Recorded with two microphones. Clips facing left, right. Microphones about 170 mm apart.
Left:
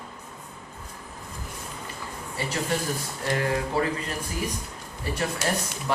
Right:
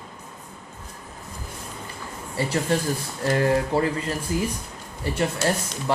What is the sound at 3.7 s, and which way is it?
Speech, 30° right (ahead or behind).